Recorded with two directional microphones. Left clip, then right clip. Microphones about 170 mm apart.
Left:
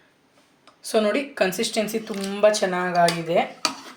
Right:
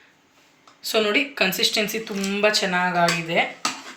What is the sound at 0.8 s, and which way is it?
Speech, 55° left (ahead or behind).